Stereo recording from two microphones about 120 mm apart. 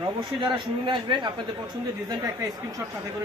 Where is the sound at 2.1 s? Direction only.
30° right (ahead or behind).